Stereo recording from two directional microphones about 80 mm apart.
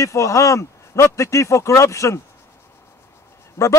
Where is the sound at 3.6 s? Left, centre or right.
Left.